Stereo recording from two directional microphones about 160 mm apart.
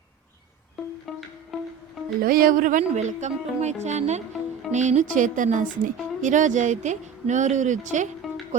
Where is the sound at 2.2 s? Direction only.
65° right (ahead or behind).